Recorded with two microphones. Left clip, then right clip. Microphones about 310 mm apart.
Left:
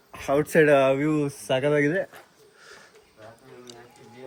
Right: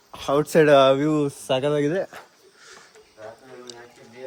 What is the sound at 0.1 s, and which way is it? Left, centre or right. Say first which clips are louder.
Speech: right 2 dB; centre.